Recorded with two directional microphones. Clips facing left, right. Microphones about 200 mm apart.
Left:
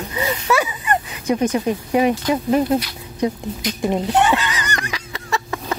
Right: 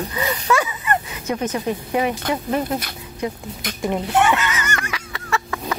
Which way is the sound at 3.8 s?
20° left (ahead or behind).